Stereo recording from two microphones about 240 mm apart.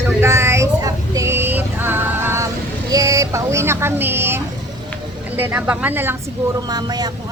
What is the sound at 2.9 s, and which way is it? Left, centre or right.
Speech, centre.